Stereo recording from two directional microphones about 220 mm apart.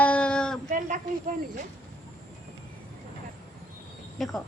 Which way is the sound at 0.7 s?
35° right (ahead or behind).